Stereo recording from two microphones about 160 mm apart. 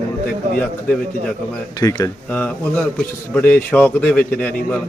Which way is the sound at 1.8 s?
20° left (ahead or behind).